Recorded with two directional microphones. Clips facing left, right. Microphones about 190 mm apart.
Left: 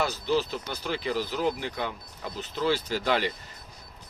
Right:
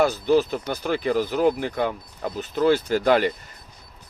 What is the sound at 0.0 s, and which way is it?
Speech, 50° right (ahead or behind).